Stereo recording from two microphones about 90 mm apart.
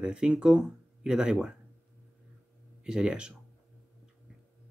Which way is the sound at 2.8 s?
10° right (ahead or behind).